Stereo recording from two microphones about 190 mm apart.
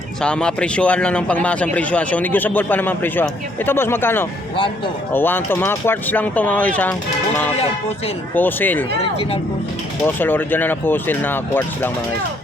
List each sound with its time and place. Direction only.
0.2 s a man's voice: 5° left (ahead or behind)
7.6 s speech: 30° left (ahead or behind)
8.4 s a man's voice: 10° left (ahead or behind)
10.2 s a man's voice: 10° left (ahead or behind)